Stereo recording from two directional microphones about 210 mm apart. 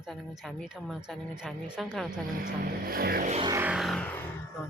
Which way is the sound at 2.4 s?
45° right (ahead or behind).